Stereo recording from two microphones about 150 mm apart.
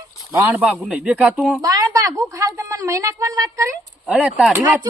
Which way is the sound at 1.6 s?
25° right (ahead or behind).